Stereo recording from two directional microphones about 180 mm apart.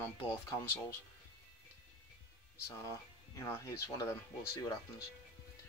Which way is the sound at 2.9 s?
15° left (ahead or behind).